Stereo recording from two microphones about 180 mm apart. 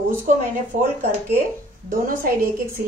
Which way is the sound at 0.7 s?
50° right (ahead or behind).